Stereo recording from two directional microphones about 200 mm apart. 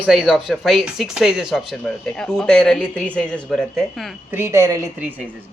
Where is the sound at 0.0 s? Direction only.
5° right (ahead or behind).